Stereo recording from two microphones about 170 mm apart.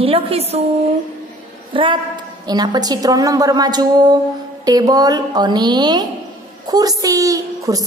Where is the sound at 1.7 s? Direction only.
30° right (ahead or behind).